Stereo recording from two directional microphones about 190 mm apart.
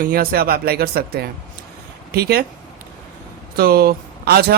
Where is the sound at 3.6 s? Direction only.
55° right (ahead or behind).